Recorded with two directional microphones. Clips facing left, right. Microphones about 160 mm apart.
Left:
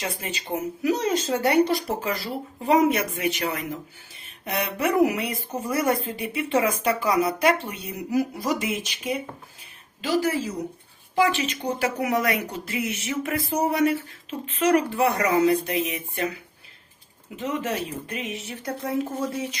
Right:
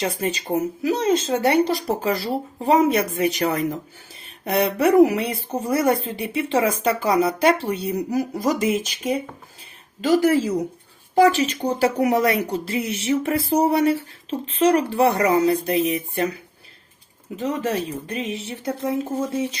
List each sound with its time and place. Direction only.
0.0 s speech: 40° right (ahead or behind)
0.8 s speech: 25° right (ahead or behind)
11.1 s speech: 40° right (ahead or behind)
17.3 s speech: 35° right (ahead or behind)